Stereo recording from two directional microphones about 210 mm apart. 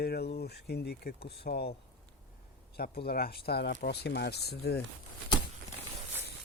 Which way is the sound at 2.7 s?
50° left (ahead or behind).